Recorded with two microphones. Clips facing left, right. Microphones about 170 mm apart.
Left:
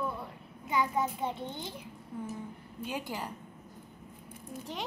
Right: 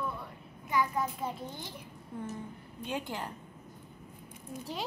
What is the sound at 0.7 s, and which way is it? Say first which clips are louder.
A child's voice: left 1 dB; 25° left (ahead or behind).